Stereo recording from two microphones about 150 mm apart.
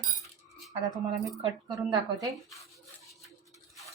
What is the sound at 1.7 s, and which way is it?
Speech, 25° right (ahead or behind).